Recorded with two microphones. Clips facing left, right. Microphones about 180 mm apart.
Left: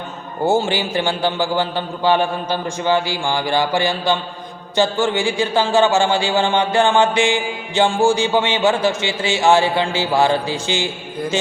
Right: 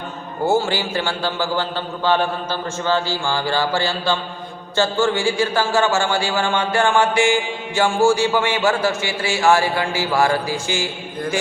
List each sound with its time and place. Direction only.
0.4 s a man's voice: 20° left (ahead or behind)